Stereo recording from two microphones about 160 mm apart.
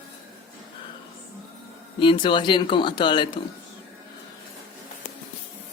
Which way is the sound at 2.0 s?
30° left (ahead or behind).